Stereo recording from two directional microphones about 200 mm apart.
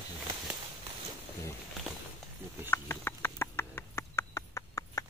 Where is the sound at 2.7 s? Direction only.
10° left (ahead or behind).